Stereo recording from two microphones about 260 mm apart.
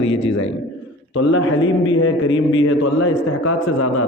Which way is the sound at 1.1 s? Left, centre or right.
Left.